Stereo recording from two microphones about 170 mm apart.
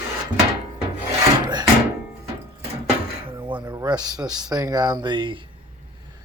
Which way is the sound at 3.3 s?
30° right (ahead or behind).